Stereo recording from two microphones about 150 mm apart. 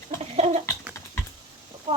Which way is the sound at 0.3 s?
45° right (ahead or behind).